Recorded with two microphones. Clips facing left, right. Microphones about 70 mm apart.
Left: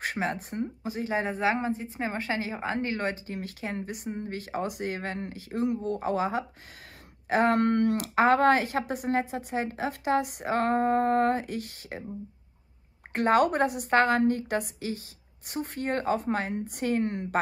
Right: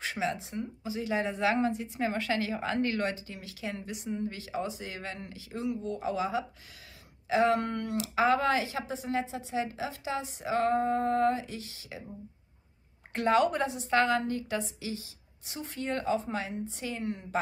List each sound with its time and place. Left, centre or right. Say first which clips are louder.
0.0 s speech: left 2 dB; left
13.1 s speech: left 3 dB; left